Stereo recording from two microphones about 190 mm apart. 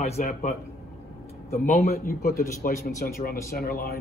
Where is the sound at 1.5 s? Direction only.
45° left (ahead or behind).